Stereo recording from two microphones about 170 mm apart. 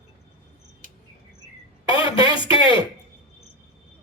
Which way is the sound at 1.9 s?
30° left (ahead or behind).